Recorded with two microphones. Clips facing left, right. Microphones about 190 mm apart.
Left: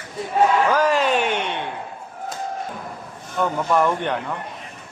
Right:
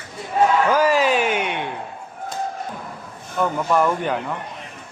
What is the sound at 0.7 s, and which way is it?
Speech, 10° right (ahead or behind).